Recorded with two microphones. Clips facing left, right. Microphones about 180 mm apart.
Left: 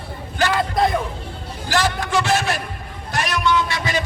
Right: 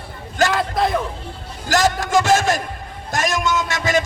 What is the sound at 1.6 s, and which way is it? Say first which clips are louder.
A man's voice: right 3 dB; 45° right (ahead or behind).